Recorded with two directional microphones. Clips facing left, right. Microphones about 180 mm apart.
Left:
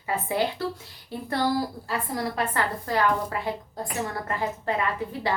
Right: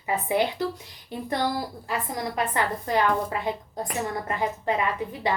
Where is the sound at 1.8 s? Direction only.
15° right (ahead or behind).